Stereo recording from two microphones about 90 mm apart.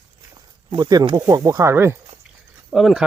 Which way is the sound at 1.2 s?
40° right (ahead or behind).